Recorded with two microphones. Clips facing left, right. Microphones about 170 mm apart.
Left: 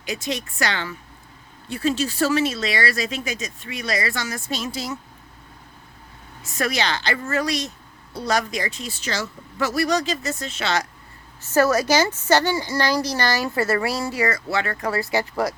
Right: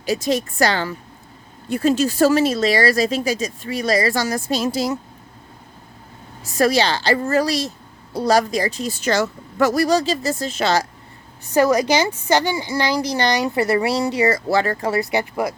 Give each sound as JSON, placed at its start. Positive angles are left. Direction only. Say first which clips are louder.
{"t": 0.0, "sound": "speech", "louder": "right 8 dB", "side_deg": -35}
{"t": 6.4, "sound": "speech", "louder": "right 7 dB", "side_deg": -30}
{"t": 9.8, "sound": "speech", "louder": "right 4 dB", "side_deg": -30}
{"t": 11.5, "sound": "a woman's voice", "louder": "right 2 dB", "side_deg": -15}
{"t": 14.3, "sound": "speech", "louder": "right 6 dB", "side_deg": -35}